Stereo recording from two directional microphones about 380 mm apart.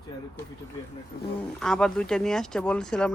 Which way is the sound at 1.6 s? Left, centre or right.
Centre.